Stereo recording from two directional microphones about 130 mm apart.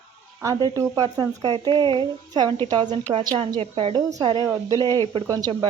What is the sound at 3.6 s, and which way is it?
Speech, 50° right (ahead or behind).